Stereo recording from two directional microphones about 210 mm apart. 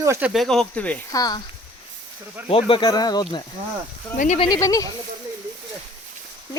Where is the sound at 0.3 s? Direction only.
Centre (ahead or behind).